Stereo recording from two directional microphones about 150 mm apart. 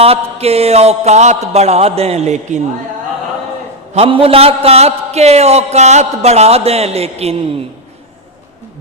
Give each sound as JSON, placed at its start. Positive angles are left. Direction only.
{"t": 0.0, "sound": "a man's voice", "side_deg": -45}
{"t": 3.9, "sound": "a man's voice", "side_deg": -40}